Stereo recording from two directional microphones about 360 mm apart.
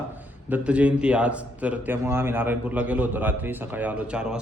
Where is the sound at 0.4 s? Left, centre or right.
Centre.